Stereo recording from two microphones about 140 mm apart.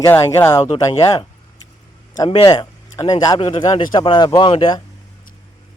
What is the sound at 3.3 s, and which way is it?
Speech, 40° left (ahead or behind).